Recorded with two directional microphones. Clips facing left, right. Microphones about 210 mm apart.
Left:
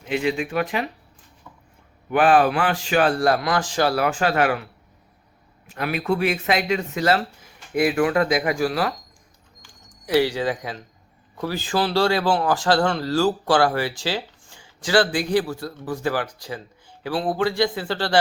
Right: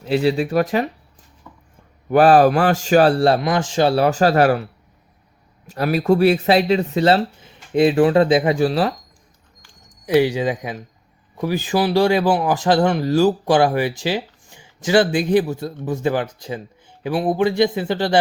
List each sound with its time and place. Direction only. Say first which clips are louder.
0.0 s speech: right 5 dB; 35° right (ahead or behind)
2.0 s speech: right 5 dB; 40° right (ahead or behind)
10.1 s speech: right 4 dB; 20° right (ahead or behind)